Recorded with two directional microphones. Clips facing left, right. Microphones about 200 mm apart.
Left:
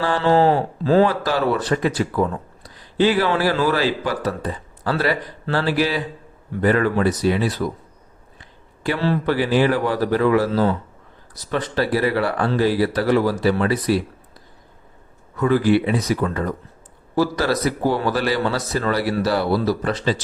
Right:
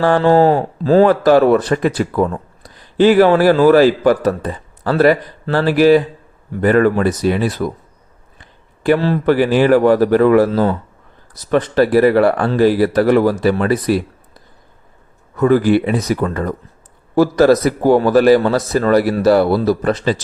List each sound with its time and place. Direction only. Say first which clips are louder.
0.0 s a man's voice: right 5 dB; 50° right (ahead or behind)
8.8 s a man's voice: right 7 dB; 50° right (ahead or behind)
15.4 s a man's voice: right 5 dB; 45° right (ahead or behind)